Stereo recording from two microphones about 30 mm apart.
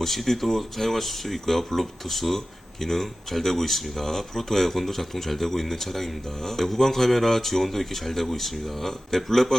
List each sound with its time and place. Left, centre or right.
0.0 s speech: centre